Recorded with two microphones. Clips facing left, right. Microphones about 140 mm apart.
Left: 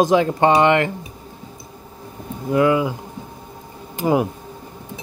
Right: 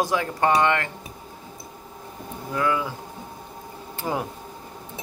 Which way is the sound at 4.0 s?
15° left (ahead or behind).